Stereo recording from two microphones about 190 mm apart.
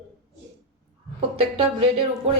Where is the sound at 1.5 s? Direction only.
30° right (ahead or behind).